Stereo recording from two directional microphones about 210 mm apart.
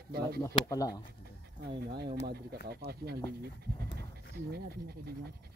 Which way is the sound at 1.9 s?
50° right (ahead or behind).